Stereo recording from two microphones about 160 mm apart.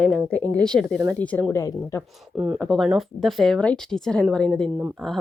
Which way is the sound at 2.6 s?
Centre (ahead or behind).